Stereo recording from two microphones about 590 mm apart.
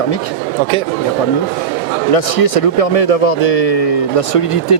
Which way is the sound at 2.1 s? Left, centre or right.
Left.